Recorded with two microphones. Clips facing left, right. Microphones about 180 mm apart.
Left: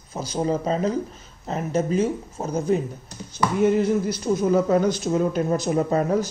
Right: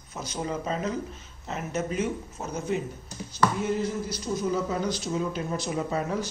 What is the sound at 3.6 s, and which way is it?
Speech, 60° left (ahead or behind).